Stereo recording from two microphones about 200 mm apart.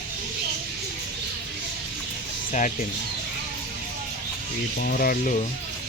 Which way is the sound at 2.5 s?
40° left (ahead or behind).